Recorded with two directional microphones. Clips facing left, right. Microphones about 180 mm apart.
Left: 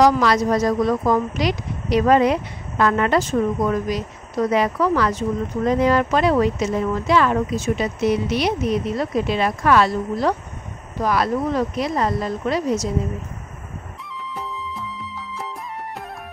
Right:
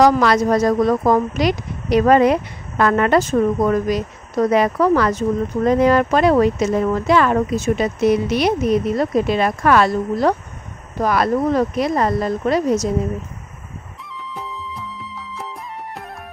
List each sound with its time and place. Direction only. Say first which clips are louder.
0.0 s speech: right 2 dB; 55° right (ahead or behind)
14.3 s music: even; centre (ahead or behind)